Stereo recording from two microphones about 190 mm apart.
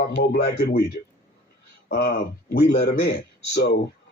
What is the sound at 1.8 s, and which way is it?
A man's voice, 55° left (ahead or behind).